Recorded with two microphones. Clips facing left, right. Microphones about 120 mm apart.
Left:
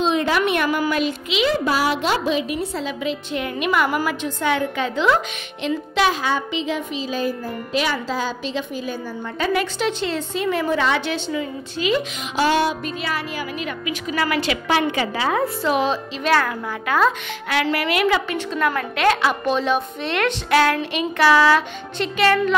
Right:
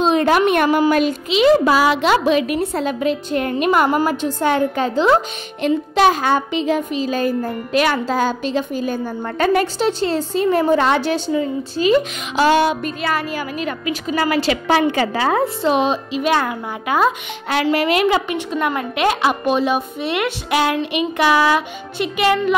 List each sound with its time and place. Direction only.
0.0 s a sound: 50° right (ahead or behind)
0.5 s a woman's voice: 45° right (ahead or behind)
1.6 s a woman's voice: 90° right; by 12.0 s 40° right (ahead or behind)
12.4 s music: 80° right
12.8 s speech: 50° right (ahead or behind)
15.4 s a woman's voice: 25° right (ahead or behind)
17.5 s a woman's voice: 25° right (ahead or behind)